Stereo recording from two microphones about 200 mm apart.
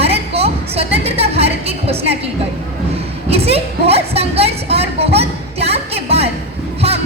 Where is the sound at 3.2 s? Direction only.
30° right (ahead or behind).